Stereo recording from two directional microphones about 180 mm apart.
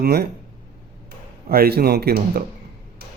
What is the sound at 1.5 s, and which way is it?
Speech, 55° right (ahead or behind).